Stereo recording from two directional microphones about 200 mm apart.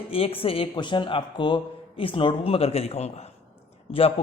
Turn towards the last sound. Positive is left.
turn(degrees=30)  # may be behind; listen again after turning